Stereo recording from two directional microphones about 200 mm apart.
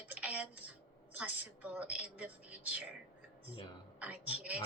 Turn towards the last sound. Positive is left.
turn(degrees=-5)  # may be behind; listen again after turning